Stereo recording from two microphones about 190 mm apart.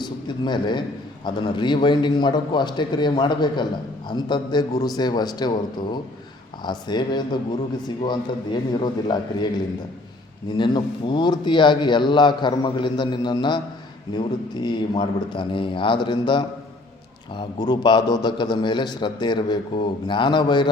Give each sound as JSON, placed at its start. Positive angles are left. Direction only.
{"t": 0.0, "sound": "a man's voice", "side_deg": 25}
{"t": 10.6, "sound": "a man's voice", "side_deg": 25}